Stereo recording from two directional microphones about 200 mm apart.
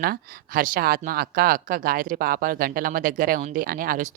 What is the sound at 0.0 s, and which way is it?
Speech, 45° right (ahead or behind).